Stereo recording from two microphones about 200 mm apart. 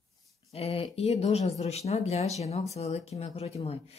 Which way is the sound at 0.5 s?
30° left (ahead or behind).